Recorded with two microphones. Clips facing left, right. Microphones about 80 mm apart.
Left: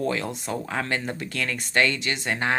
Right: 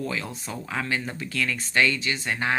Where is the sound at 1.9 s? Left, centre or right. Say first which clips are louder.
Left 1 dB; left.